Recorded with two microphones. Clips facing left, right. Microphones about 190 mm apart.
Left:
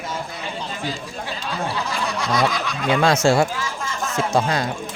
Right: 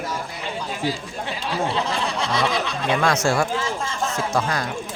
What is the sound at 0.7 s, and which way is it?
Speech, 10° right (ahead or behind).